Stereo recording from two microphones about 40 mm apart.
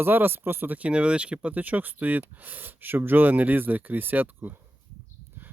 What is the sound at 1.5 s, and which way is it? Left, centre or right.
Speech, right.